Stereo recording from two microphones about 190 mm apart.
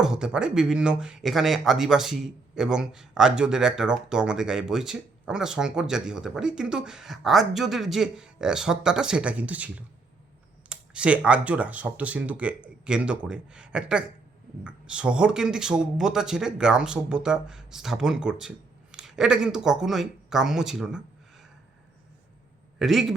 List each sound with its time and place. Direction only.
0.0 s speech: 5° right (ahead or behind)
22.8 s speech: centre (ahead or behind)